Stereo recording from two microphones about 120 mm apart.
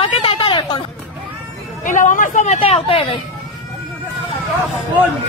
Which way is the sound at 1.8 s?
90° left.